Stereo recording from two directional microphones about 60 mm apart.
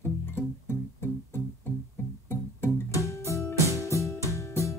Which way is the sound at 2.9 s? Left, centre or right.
Left.